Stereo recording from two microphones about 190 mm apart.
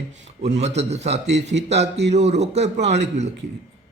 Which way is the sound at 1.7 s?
35° right (ahead or behind).